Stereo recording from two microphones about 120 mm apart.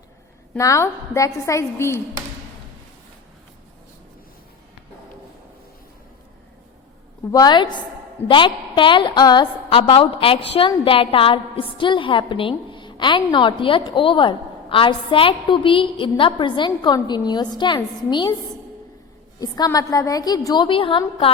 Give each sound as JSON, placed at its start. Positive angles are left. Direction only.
{"t": 0.5, "sound": "a woman's voice", "side_deg": 25}
{"t": 7.3, "sound": "a woman's voice", "side_deg": 30}
{"t": 9.9, "sound": "a woman's voice", "side_deg": 50}
{"t": 19.4, "sound": "a woman's voice", "side_deg": 30}